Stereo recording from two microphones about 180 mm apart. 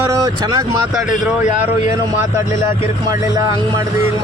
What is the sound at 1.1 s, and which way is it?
Speech, 45° left (ahead or behind).